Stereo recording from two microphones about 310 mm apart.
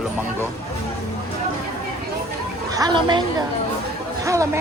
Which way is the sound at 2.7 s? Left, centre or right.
Centre.